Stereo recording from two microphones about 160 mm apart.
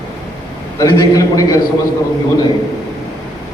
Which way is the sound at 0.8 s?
20° left (ahead or behind).